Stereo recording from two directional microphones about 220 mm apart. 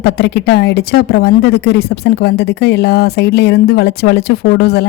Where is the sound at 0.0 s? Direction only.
50° left (ahead or behind).